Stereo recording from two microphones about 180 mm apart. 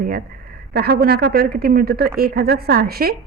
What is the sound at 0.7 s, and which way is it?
Speech, 60° right (ahead or behind).